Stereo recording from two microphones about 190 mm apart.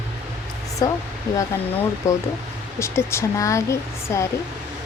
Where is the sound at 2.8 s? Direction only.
15° left (ahead or behind).